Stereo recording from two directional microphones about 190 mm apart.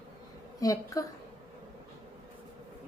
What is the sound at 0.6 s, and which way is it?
Speech, 15° left (ahead or behind).